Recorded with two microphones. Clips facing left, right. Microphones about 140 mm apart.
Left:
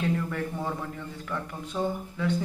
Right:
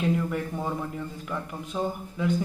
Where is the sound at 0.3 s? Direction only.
15° right (ahead or behind).